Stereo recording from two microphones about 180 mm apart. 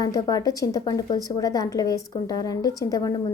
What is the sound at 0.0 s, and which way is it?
A woman's voice, 20° left (ahead or behind).